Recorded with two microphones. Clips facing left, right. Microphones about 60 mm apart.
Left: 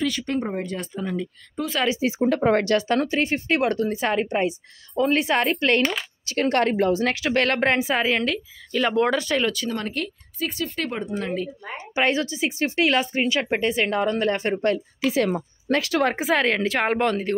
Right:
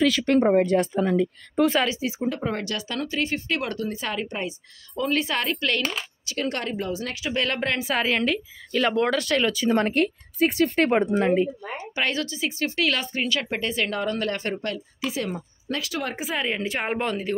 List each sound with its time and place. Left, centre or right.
0.0 s speech: right
2.0 s speech: left
6.2 s speech: left
7.8 s speech: centre
9.7 s a woman's voice: right
11.1 s speech: right
11.9 s speech: left
15.0 s speech: left